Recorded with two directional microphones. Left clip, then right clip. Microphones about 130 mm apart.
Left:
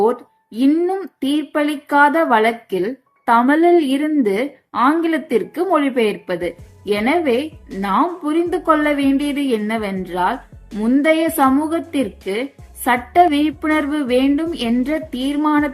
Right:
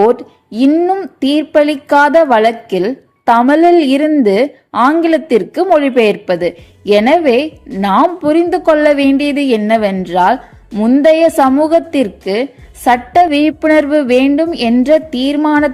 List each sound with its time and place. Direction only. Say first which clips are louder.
0.0 s speech: right 7 dB; 50° right (ahead or behind)
0.7 s speech: right 6 dB; 35° right (ahead or behind)
1.2 s a woman's voice: right 9 dB; 45° right (ahead or behind)